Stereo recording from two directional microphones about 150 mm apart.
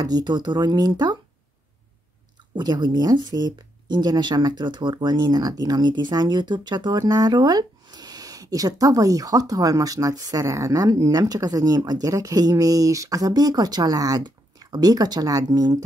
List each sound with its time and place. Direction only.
0.0 s speech: 25° right (ahead or behind)
2.5 s speech: 30° right (ahead or behind)